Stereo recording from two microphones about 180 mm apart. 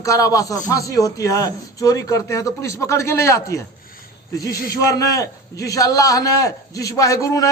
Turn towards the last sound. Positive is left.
turn(degrees=20)  # may be behind; listen again after turning